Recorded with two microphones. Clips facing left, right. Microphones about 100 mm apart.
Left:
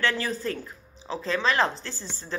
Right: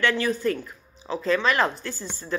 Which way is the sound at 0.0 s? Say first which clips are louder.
Right 4 dB; 35° left (ahead or behind).